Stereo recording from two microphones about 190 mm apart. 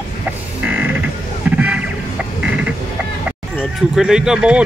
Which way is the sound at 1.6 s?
5° right (ahead or behind).